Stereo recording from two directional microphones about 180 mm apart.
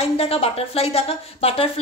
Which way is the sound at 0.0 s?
35° left (ahead or behind).